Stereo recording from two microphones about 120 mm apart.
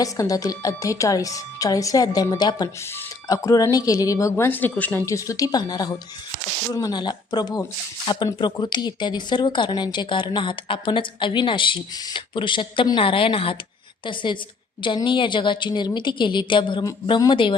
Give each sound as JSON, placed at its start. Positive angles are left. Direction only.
{"t": 0.0, "sound": "a woman's voice", "side_deg": 30}
{"t": 5.0, "sound": "a woman's voice", "side_deg": 25}